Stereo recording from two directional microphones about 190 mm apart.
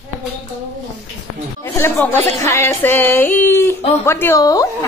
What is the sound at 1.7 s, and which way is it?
Music, 10° left (ahead or behind).